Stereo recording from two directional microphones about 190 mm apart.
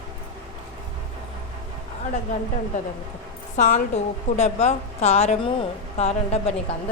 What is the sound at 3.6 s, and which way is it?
A woman's voice, 35° left (ahead or behind).